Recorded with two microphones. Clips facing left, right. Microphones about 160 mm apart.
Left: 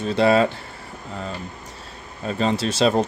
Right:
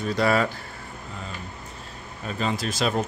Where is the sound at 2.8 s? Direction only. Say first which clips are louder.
Left 7 dB; 30° left (ahead or behind).